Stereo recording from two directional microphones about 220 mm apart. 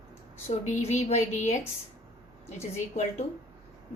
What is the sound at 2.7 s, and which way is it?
Speech, 30° left (ahead or behind).